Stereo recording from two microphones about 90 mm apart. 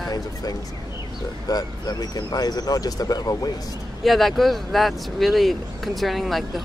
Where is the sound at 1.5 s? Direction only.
45° left (ahead or behind).